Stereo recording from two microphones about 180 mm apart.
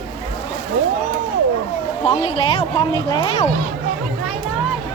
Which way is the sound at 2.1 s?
30° left (ahead or behind).